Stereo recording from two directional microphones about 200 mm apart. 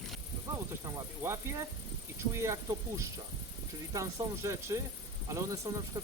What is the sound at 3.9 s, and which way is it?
Speech, 15° right (ahead or behind).